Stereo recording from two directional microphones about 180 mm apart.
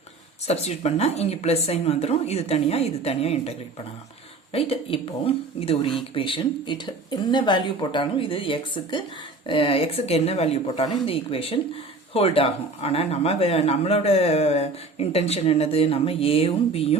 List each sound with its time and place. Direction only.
0.4 s speech: 35° left (ahead or behind)
4.5 s speech: 30° left (ahead or behind)